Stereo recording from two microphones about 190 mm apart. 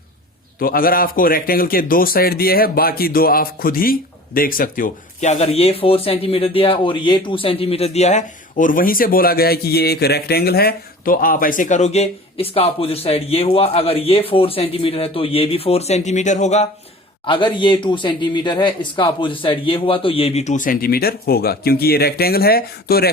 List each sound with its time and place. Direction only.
0.6 s speech: 50° left (ahead or behind)
17.2 s speech: 25° left (ahead or behind); by 23.0 s 55° left (ahead or behind)